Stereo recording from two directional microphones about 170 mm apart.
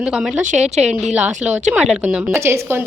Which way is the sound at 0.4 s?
45° right (ahead or behind).